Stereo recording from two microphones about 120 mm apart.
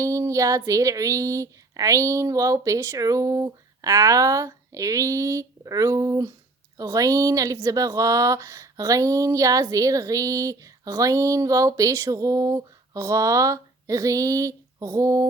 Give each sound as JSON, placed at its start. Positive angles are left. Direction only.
{"t": 0.0, "sound": "speech", "side_deg": -25}